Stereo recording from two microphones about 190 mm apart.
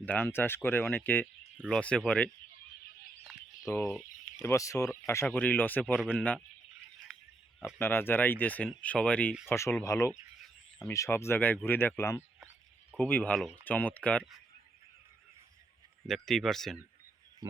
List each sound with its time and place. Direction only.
0.0 s speech: 10° left (ahead or behind)
1.5 s speech: 5° right (ahead or behind)
1.8 s speech: 5° left (ahead or behind)
3.7 s speech: 15° left (ahead or behind)
6.0 s speech: 5° right (ahead or behind)
7.1 s pig: centre (ahead or behind)
7.8 s speech: 10° left (ahead or behind)
16.0 s speech: centre (ahead or behind)